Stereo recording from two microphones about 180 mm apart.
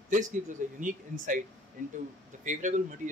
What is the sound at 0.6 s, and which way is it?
Speech, 45° right (ahead or behind).